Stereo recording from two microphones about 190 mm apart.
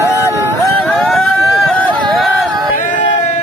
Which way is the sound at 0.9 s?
5° left (ahead or behind).